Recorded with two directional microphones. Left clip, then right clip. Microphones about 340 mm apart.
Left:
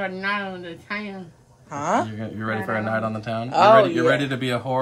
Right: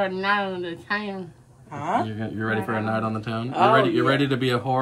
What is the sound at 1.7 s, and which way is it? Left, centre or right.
Speech, left.